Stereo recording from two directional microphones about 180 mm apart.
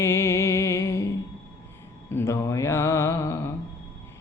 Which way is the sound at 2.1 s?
15° left (ahead or behind).